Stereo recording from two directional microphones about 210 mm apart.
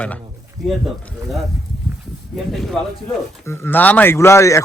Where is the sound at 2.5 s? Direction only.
Centre (ahead or behind).